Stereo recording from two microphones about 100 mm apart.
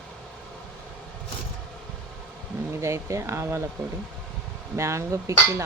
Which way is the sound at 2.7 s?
30° right (ahead or behind).